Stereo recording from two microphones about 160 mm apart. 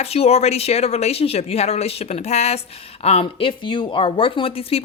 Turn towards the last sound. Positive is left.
turn(degrees=35)  # may be behind; listen again after turning